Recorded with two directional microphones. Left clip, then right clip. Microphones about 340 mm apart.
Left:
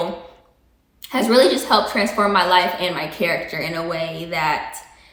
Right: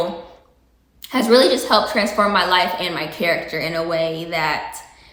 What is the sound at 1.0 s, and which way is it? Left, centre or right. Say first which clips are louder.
A woman's voice: right 1 dB; centre.